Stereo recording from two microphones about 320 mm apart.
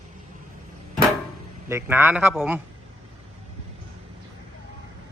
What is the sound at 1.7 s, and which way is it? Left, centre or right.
Speech, centre.